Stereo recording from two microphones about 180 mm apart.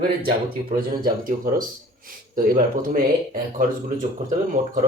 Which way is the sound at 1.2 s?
50° right (ahead or behind).